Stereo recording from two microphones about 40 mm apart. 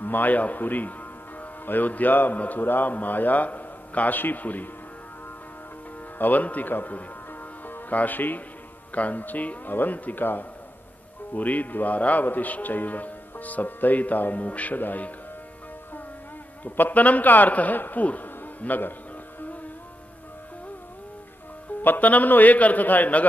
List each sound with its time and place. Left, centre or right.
0.0 s speech: left
6.1 s speech: left
11.3 s speech: left
16.6 s speech: left
21.8 s speech: left